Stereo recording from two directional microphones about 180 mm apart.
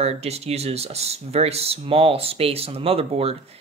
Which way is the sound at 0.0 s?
35° right (ahead or behind).